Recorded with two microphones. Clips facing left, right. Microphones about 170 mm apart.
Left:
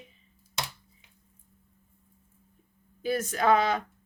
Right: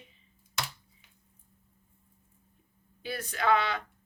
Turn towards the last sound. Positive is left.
turn(degrees=45)  # may be behind; listen again after turning